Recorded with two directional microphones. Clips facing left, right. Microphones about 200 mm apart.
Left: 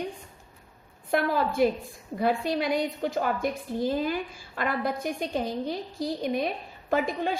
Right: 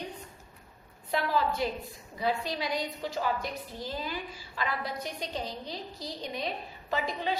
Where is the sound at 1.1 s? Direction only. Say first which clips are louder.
Left 3 dB; 50° left (ahead or behind).